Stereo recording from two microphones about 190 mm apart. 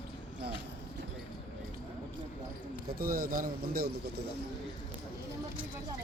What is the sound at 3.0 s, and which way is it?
Speech, 50° right (ahead or behind).